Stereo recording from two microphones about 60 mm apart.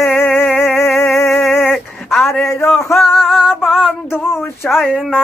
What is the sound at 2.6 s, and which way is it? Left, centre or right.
Music, centre.